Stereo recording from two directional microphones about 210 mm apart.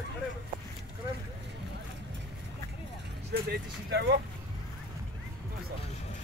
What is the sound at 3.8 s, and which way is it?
Speech, 55° right (ahead or behind).